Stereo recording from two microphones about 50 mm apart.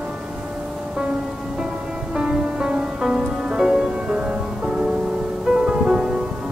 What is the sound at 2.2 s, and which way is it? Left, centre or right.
Music, centre.